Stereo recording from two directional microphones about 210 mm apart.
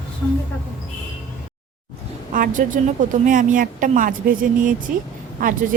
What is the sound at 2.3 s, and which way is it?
A woman's voice, 40° right (ahead or behind).